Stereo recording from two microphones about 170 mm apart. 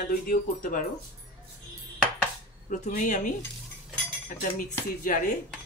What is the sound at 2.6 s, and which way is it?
Speech, 45° left (ahead or behind).